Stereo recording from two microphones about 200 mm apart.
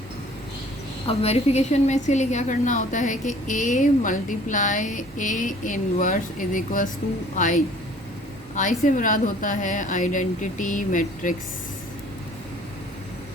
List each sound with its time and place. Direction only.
1.0 s a woman's voice: 30° left (ahead or behind)
8.8 s a woman's voice: 40° left (ahead or behind)